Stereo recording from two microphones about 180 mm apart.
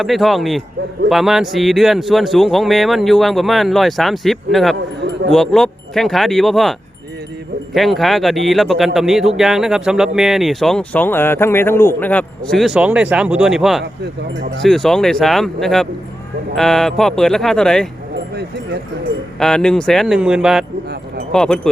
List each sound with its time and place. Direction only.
0.0 s speech: centre (ahead or behind)
4.9 s a sound: 75° right (ahead or behind)
5.3 s speech: centre (ahead or behind)
19.4 s speech: 5° left (ahead or behind)